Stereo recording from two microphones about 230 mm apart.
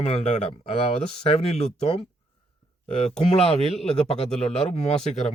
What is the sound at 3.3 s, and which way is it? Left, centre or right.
Speech, left.